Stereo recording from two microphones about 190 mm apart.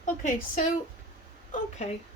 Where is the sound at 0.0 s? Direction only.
40° left (ahead or behind).